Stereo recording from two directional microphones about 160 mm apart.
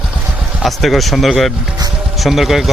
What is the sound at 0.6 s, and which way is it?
Speech, centre (ahead or behind).